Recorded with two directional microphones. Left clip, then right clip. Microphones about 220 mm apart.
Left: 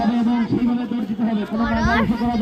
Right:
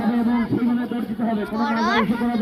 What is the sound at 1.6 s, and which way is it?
Speech, 40° right (ahead or behind).